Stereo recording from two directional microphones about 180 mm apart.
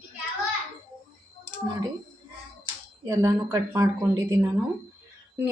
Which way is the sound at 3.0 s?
20° right (ahead or behind).